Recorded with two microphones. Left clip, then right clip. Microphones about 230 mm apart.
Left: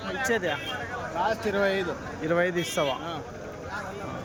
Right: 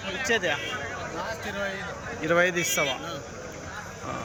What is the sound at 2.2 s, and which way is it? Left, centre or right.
Speech, centre.